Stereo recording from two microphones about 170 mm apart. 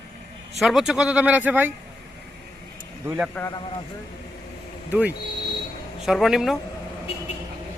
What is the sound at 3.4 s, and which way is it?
Speech, 10° left (ahead or behind).